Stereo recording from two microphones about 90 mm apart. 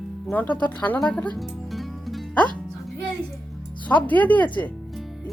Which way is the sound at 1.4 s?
Centre (ahead or behind).